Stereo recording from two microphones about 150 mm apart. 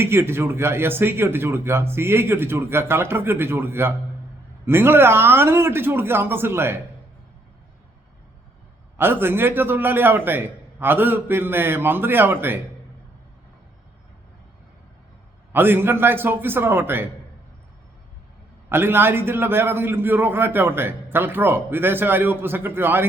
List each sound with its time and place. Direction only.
0.0 s a man's voice: 15° right (ahead or behind)
9.0 s a man's voice: 15° right (ahead or behind)
15.5 s a man's voice: 15° right (ahead or behind)
18.7 s a man's voice: 15° right (ahead or behind)